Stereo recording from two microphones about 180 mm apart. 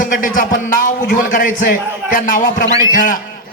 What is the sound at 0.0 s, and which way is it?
A man's voice, 50° left (ahead or behind).